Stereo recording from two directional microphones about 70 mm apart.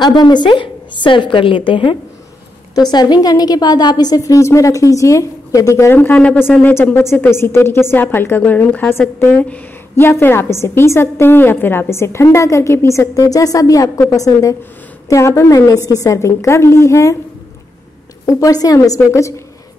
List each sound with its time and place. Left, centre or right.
0.0 s a woman's voice: left
2.9 s a woman's voice: left
4.2 s a woman's voice: left
5.9 s a woman's voice: left
6.1 s a woman's voice: centre
6.7 s a woman's voice: left
9.9 s a woman's voice: left
18.2 s a woman's voice: left